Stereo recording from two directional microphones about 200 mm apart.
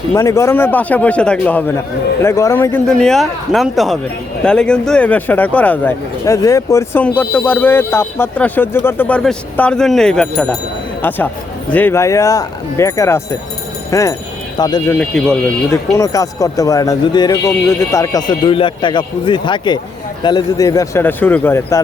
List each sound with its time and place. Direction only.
0.1 s speech: 15° left (ahead or behind)
11.7 s a man's voice: 10° left (ahead or behind)